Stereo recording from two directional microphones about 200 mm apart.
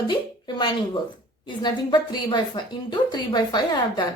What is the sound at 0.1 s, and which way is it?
A woman's voice, 20° left (ahead or behind).